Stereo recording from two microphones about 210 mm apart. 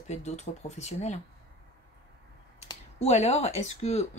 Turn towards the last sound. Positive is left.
turn(degrees=30)  # may be behind; listen again after turning